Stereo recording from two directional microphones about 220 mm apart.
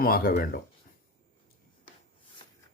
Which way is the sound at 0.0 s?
40° left (ahead or behind).